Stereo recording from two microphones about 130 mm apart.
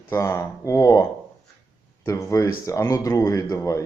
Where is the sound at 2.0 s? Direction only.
25° left (ahead or behind).